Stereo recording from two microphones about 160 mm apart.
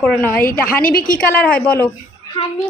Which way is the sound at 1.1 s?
10° left (ahead or behind).